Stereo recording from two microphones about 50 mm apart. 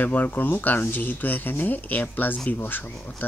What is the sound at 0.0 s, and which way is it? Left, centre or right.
Speech, left.